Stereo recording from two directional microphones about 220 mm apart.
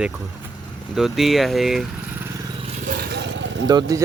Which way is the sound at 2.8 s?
45° right (ahead or behind).